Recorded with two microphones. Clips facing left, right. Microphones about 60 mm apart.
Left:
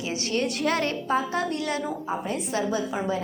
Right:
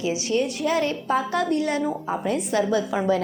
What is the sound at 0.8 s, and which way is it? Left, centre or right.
Speech, left.